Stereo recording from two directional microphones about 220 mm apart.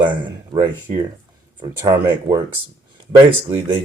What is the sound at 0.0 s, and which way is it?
Speech, 20° right (ahead or behind).